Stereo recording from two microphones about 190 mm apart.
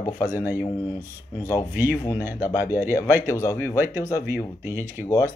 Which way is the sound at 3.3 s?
15° left (ahead or behind).